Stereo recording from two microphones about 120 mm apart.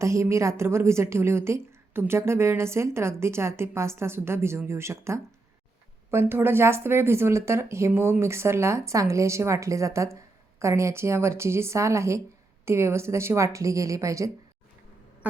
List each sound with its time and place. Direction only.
0.0 s a woman's voice: 25° right (ahead or behind)